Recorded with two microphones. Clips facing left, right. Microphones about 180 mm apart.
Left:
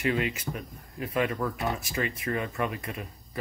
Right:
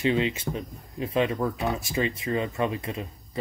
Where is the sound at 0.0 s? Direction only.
25° right (ahead or behind).